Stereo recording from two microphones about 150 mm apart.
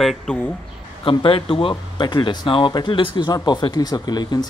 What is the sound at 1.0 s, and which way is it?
Speech, 35° left (ahead or behind).